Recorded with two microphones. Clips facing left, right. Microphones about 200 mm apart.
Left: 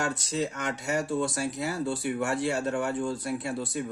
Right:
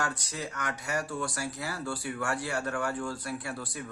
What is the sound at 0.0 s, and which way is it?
Speech, 25° left (ahead or behind).